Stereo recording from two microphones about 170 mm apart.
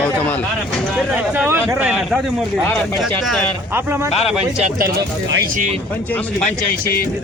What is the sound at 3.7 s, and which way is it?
Speech, 15° right (ahead or behind).